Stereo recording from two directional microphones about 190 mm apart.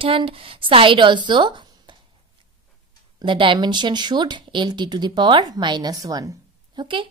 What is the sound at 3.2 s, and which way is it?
A woman's voice, 25° right (ahead or behind).